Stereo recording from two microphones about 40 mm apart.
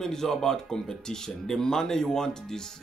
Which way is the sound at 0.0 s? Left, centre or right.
Centre.